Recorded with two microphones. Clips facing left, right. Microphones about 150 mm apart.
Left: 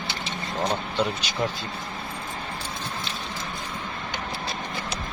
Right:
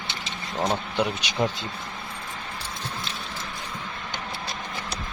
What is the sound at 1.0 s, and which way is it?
Speech, 20° right (ahead or behind).